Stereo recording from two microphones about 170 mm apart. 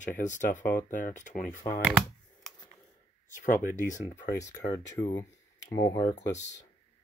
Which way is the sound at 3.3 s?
50° left (ahead or behind).